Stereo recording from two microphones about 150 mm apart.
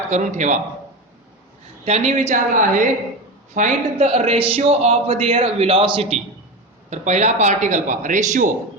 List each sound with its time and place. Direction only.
0.1 s a man's voice: 55° right (ahead or behind)
1.8 s a man's voice: 50° right (ahead or behind)